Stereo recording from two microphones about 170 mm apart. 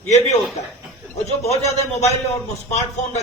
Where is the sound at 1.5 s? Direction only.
20° left (ahead or behind).